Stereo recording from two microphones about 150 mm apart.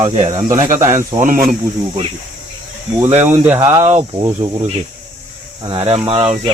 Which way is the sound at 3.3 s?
15° right (ahead or behind).